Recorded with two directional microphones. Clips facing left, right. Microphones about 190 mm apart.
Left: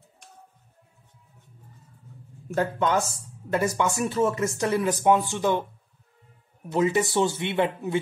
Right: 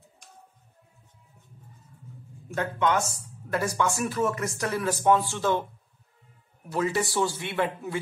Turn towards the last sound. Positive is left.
turn(degrees=20)  # may be behind; listen again after turning